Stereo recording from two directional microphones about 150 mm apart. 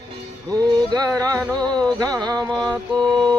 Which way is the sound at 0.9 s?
25° right (ahead or behind).